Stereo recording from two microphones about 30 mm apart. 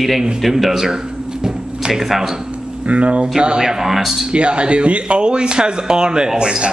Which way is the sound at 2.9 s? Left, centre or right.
Right.